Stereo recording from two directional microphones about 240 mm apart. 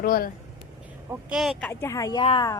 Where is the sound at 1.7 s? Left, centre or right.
Centre.